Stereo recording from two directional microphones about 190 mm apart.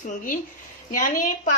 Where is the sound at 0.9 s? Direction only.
45° left (ahead or behind).